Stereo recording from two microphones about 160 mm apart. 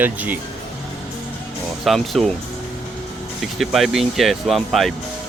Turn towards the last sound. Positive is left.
turn(degrees=0)  # may be behind; listen again after turning